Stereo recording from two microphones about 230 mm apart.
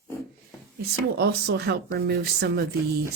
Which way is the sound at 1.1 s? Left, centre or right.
Right.